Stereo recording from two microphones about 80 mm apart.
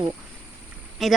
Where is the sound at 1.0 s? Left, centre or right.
Centre.